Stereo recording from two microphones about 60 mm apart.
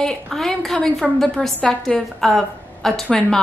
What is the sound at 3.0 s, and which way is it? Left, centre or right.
Speech, centre.